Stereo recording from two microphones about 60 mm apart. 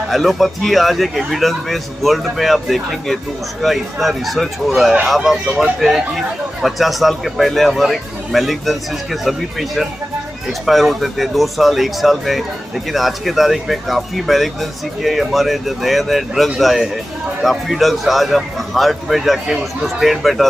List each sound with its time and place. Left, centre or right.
0.1 s speech: centre